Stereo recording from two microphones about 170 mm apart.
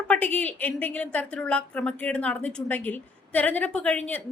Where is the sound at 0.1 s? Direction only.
10° left (ahead or behind).